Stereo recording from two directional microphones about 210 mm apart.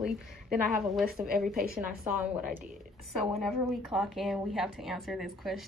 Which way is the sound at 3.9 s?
Centre (ahead or behind).